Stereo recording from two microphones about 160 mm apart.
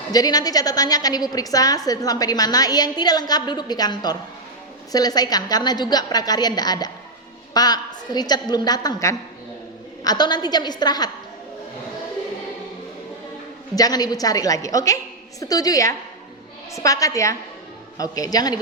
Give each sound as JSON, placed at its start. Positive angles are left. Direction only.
{"t": 0.1, "sound": "a woman's voice", "side_deg": 25}
{"t": 13.7, "sound": "a woman's voice", "side_deg": 25}